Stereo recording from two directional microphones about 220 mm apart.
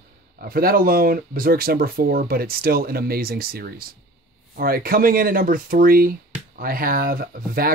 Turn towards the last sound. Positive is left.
turn(degrees=-40)  # may be behind; listen again after turning